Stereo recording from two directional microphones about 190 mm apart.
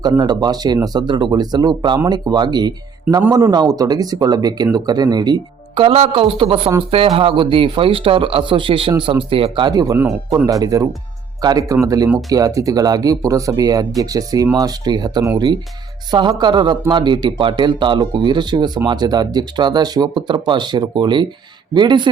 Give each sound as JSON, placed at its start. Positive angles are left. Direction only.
{"t": 0.0, "sound": "a man's voice", "side_deg": -20}